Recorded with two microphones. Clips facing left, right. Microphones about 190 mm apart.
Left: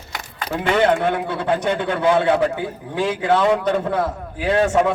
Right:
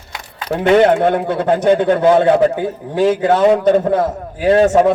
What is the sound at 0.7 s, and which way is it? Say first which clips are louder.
A man's voice: right 6 dB; 45° right (ahead or behind).